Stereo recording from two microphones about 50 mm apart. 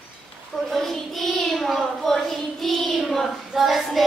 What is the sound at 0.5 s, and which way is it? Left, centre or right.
Child singing, centre.